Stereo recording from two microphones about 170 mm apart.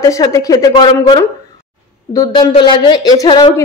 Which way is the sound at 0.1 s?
20° left (ahead or behind).